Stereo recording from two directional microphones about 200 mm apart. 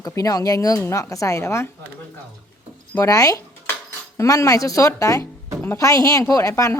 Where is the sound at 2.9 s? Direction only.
15° left (ahead or behind).